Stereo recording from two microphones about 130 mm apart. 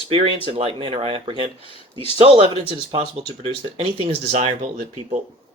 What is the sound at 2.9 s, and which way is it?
Speech, 50° right (ahead or behind).